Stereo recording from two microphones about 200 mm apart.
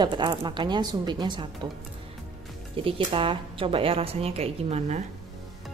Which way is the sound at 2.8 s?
25° right (ahead or behind).